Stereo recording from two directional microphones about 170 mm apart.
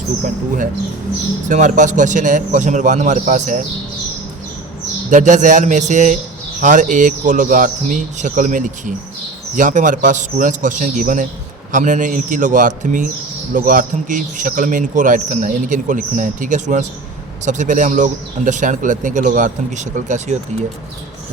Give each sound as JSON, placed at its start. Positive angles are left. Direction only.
{"t": 1.5, "sound": "a man's voice", "side_deg": -45}
{"t": 5.1, "sound": "a man's voice", "side_deg": -45}